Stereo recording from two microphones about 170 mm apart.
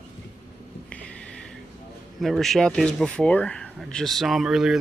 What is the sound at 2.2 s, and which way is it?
Speech, centre (ahead or behind).